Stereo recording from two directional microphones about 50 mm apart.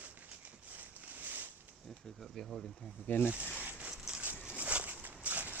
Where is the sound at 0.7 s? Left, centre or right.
Right.